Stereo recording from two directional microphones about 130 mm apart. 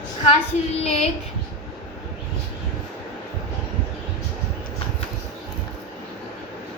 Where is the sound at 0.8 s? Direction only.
55° left (ahead or behind).